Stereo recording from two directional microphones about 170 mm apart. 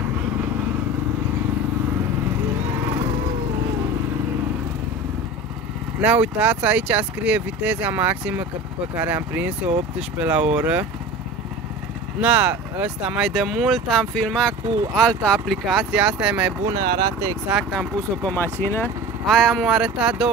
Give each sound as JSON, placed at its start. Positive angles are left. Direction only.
{"t": 5.9, "sound": "speech", "side_deg": -10}
{"t": 12.2, "sound": "speech", "side_deg": -10}
{"t": 16.7, "sound": "speech", "side_deg": -25}
{"t": 17.5, "sound": "speech", "side_deg": 0}
{"t": 19.2, "sound": "speech", "side_deg": 0}